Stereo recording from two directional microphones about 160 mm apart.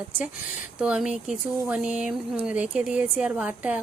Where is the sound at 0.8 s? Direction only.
5° right (ahead or behind).